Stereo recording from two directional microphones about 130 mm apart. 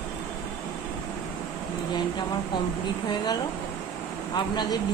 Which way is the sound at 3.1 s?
35° left (ahead or behind).